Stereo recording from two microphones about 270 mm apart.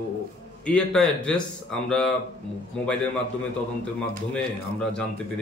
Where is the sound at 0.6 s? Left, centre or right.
Centre.